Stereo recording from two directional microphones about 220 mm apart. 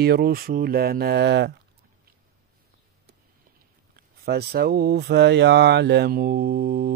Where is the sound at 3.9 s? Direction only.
45° right (ahead or behind).